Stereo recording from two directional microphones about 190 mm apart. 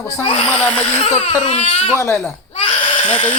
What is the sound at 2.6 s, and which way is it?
Bleat, 25° left (ahead or behind).